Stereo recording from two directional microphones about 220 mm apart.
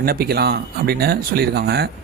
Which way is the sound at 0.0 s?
45° right (ahead or behind).